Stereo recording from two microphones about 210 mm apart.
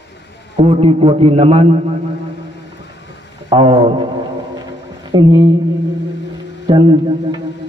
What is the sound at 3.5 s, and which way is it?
Speech, 20° right (ahead or behind).